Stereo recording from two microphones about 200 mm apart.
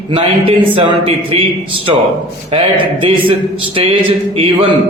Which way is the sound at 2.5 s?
25° right (ahead or behind).